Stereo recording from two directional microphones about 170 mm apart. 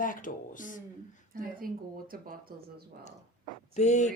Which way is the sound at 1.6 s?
55° right (ahead or behind).